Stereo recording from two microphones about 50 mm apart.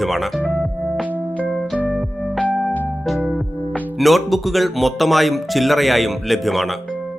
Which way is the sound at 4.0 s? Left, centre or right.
Centre.